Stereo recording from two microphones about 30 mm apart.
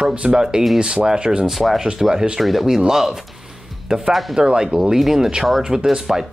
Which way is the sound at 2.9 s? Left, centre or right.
Centre.